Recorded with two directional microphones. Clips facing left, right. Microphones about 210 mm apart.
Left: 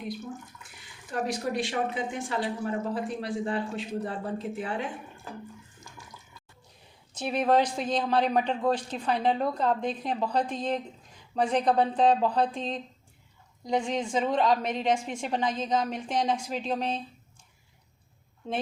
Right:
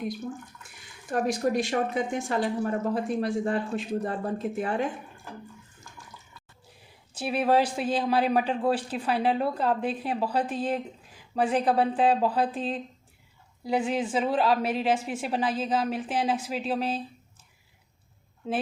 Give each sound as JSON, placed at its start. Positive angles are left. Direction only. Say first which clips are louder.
{"t": 1.1, "sound": "speech", "louder": "right 4 dB", "side_deg": -45}
{"t": 7.1, "sound": "speech", "louder": "right 1 dB", "side_deg": -10}
{"t": 18.4, "sound": "a woman's voice", "louder": "right 3 dB", "side_deg": -5}